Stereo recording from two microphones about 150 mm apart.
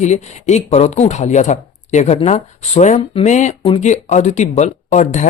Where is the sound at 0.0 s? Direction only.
50° left (ahead or behind).